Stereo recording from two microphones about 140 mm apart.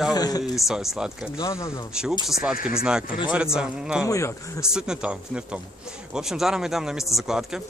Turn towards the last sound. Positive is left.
turn(degrees=-5)  # may be behind; listen again after turning